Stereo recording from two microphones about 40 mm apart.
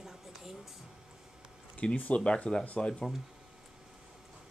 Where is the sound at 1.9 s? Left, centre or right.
Left.